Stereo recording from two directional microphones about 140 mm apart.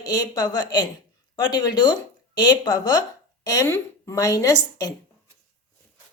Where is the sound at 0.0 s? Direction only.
30° left (ahead or behind).